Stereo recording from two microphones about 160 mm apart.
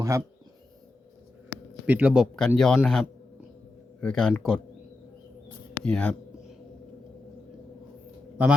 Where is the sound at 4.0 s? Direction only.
5° left (ahead or behind).